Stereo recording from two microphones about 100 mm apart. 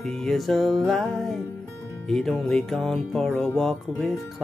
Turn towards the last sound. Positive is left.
turn(degrees=0)  # may be behind; listen again after turning